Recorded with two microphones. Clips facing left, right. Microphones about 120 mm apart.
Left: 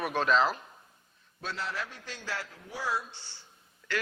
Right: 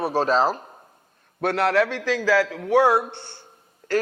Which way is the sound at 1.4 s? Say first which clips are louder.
Right 17 dB; 65° right (ahead or behind).